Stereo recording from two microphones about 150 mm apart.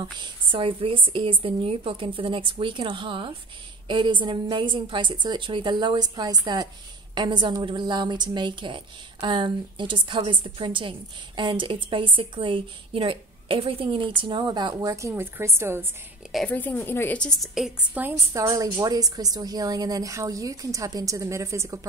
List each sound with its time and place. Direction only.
0.0 s a woman's voice: 35° right (ahead or behind); by 15.9 s 15° right (ahead or behind)
16.4 s a woman's voice: 10° left (ahead or behind); by 21.7 s 20° right (ahead or behind)